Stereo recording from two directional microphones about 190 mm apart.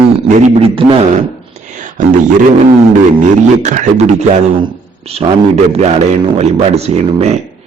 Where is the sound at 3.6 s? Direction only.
40° right (ahead or behind).